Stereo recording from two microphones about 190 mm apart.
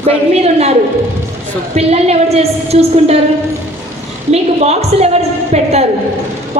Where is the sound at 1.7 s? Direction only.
35° right (ahead or behind).